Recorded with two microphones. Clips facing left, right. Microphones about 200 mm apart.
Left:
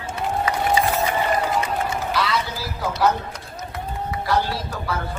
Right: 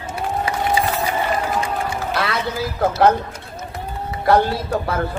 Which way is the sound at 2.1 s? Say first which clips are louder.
Right 2 dB; 55° right (ahead or behind).